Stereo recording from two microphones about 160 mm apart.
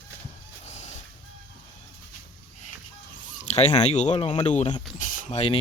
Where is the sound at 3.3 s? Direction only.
45° left (ahead or behind).